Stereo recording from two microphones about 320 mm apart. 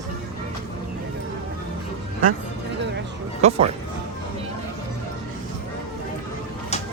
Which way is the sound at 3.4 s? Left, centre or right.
Centre.